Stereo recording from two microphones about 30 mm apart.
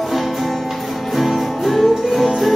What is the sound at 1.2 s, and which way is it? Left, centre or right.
Music, centre.